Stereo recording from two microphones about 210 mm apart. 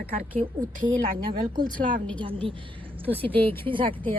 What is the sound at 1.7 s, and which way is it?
Speech, 40° right (ahead or behind).